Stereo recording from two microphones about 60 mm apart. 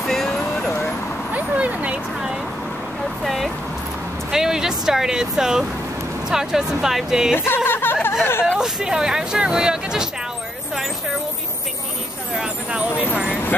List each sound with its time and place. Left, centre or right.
0.0 s vehicle: centre
1.3 s vehicle: right
3.3 s a sound: centre
4.3 s speech: centre
7.3 s a sound: left
8.2 s speech: left
8.5 s speech: centre
13.1 s speech: centre